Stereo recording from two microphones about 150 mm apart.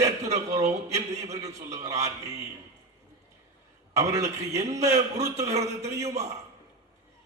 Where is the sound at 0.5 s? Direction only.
20° right (ahead or behind).